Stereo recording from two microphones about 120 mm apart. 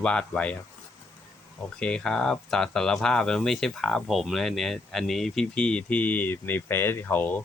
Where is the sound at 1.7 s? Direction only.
10° left (ahead or behind).